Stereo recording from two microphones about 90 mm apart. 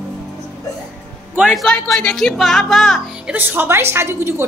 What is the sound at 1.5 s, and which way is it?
Speech, centre (ahead or behind).